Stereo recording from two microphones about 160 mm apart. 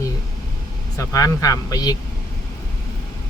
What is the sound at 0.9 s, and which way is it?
Speech, 20° left (ahead or behind).